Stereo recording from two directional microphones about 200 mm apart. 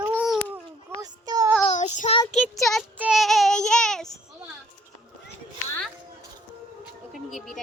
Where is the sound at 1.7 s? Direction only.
35° left (ahead or behind).